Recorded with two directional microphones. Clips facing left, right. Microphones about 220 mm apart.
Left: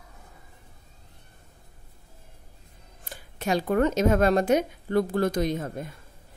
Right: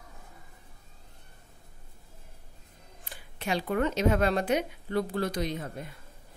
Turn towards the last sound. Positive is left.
turn(degrees=45)  # may be behind; listen again after turning